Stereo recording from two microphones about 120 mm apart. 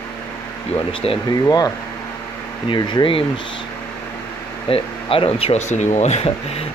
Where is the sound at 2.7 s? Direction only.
40° left (ahead or behind).